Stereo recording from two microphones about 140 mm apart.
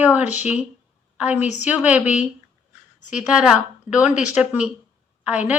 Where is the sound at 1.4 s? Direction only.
55° left (ahead or behind).